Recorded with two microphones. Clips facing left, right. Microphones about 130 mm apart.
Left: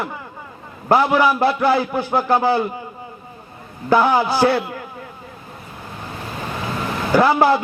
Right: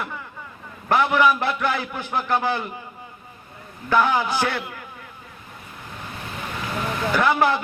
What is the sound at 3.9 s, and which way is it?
Speech, 30° left (ahead or behind).